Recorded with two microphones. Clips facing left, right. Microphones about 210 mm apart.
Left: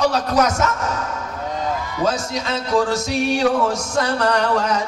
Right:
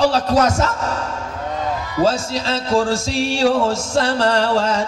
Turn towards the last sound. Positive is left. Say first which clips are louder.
# right 2 dB
turn(degrees=-30)  # may be behind; listen again after turning